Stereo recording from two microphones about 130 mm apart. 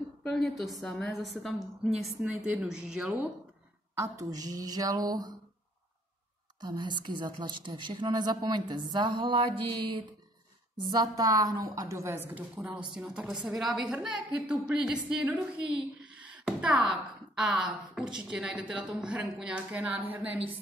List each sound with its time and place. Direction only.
0.2 s a woman's voice: 5° left (ahead or behind)
3.9 s a woman's voice: 25° right (ahead or behind)
6.6 s a woman's voice: 35° right (ahead or behind)
10.8 s a woman's voice: 35° right (ahead or behind); by 20.2 s 10° right (ahead or behind)